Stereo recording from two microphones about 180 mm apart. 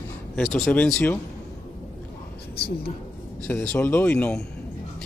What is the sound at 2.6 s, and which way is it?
Speech, 60° left (ahead or behind).